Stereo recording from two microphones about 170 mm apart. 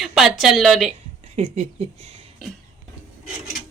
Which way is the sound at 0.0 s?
Centre (ahead or behind).